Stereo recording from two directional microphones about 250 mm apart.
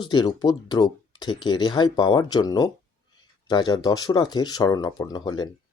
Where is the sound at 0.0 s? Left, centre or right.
Centre.